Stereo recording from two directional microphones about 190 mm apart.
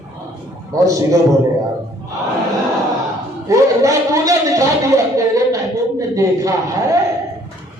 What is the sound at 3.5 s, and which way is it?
Speech, 15° right (ahead or behind).